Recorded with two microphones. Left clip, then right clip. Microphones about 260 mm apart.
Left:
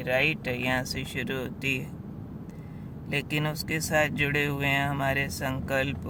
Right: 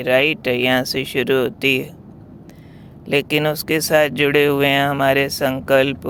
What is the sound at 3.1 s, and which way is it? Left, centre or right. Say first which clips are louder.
Speech: right 13 dB; right.